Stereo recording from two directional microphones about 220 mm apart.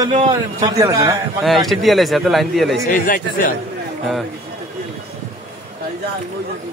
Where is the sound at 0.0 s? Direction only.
20° right (ahead or behind).